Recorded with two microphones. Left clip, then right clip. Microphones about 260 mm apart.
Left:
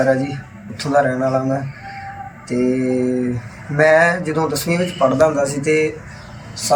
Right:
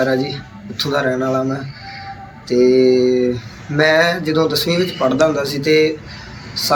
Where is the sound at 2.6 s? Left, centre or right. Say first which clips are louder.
Right 7 dB; centre.